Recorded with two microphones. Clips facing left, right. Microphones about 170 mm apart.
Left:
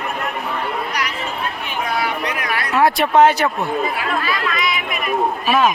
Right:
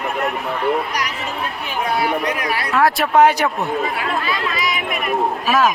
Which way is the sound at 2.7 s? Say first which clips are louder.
Left 1 dB; centre (ahead or behind).